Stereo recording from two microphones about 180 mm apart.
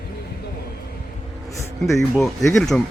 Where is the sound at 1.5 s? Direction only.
15° left (ahead or behind).